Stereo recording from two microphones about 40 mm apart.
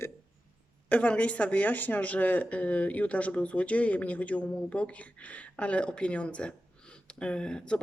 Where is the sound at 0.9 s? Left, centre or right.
Left.